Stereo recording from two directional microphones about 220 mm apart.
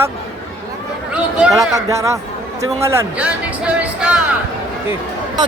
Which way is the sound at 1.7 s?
15° right (ahead or behind).